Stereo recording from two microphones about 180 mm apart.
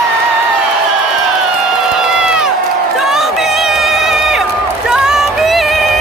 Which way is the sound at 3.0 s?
Centre (ahead or behind).